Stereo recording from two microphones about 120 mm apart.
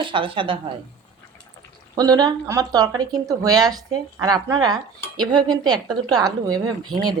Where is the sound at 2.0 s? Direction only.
30° right (ahead or behind).